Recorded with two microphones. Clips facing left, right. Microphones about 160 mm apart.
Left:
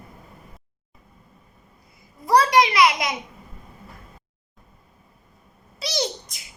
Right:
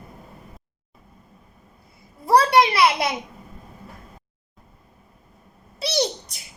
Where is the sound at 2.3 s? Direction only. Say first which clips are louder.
Right 1 dB; 30° right (ahead or behind).